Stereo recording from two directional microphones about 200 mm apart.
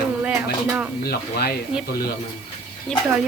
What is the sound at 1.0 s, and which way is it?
Speech, 50° left (ahead or behind).